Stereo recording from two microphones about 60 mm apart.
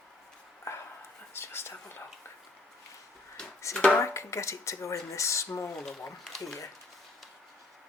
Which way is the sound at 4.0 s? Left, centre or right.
Left.